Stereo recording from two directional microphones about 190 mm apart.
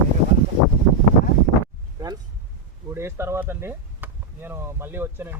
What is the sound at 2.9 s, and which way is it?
Speech, 15° right (ahead or behind).